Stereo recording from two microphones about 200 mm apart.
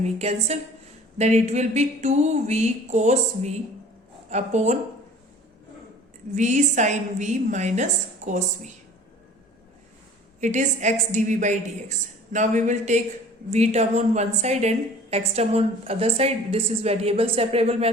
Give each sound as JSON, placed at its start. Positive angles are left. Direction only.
{"t": 0.0, "sound": "a woman's voice", "side_deg": -35}
{"t": 6.3, "sound": "a woman's voice", "side_deg": -35}
{"t": 10.4, "sound": "a woman's voice", "side_deg": -35}